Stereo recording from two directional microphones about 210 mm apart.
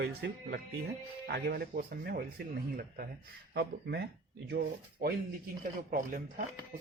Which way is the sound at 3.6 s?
50° right (ahead or behind).